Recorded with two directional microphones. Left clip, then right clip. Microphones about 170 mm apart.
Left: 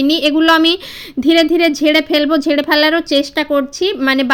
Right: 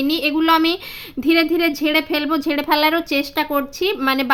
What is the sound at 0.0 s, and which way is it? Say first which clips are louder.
Speech: left 6 dB; 25° left (ahead or behind).